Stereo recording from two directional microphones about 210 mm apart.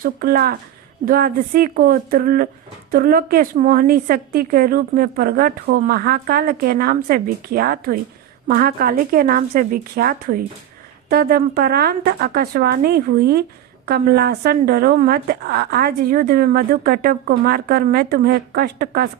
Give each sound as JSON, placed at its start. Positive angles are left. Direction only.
{"t": 0.0, "sound": "a woman's voice", "side_deg": -45}